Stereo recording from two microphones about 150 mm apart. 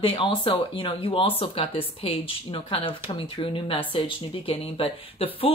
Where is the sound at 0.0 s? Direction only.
35° left (ahead or behind).